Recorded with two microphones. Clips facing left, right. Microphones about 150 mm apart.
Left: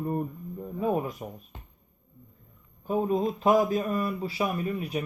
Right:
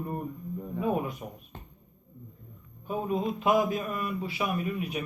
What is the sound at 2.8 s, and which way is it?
Speech, 35° left (ahead or behind).